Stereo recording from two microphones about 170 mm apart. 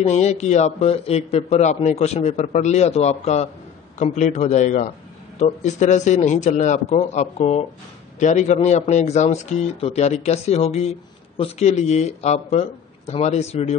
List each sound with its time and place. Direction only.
0.0 s a man's voice: 40° left (ahead or behind)